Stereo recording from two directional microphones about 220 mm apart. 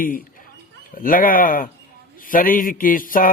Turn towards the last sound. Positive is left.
turn(degrees=40)  # may be behind; listen again after turning